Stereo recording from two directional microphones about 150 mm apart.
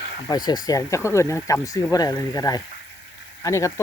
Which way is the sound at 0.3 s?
30° left (ahead or behind).